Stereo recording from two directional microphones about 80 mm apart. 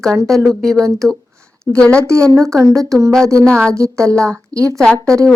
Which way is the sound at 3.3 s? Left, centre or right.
Centre.